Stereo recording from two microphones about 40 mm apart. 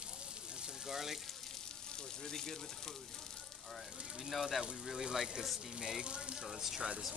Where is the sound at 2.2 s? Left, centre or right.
Centre.